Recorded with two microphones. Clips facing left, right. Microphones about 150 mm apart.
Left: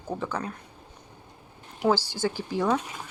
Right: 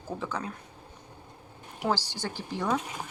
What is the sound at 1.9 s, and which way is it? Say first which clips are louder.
Speech: left 4 dB; 15° right (ahead or behind).